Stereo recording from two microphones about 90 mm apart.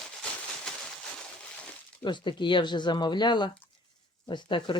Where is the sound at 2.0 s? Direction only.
60° left (ahead or behind).